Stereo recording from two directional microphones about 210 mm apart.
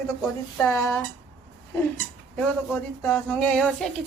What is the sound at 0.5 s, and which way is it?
Speech, 10° left (ahead or behind).